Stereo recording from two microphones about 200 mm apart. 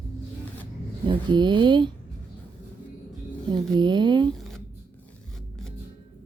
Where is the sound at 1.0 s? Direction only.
25° right (ahead or behind).